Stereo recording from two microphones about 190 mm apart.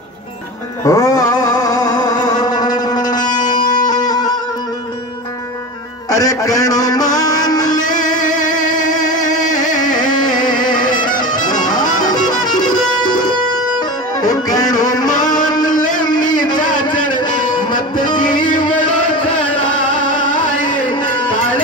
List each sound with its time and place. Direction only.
0.8 s a sound: 15° left (ahead or behind)
3.4 s music: 20° left (ahead or behind)
6.0 s music: 20° left (ahead or behind)
7.9 s music: 40° left (ahead or behind)
9.0 s a sound: 40° left (ahead or behind)
9.9 s music: 20° left (ahead or behind)
13.7 s music: 20° left (ahead or behind)
15.0 s music: 40° left (ahead or behind)
15.3 s music: 20° left (ahead or behind)
15.7 s a sound: 45° left (ahead or behind)
16.3 s a sound: 20° left (ahead or behind)
16.8 s music: 25° left (ahead or behind)